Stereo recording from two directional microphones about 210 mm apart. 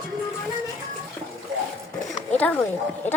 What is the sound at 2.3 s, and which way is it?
Speech, 5° left (ahead or behind).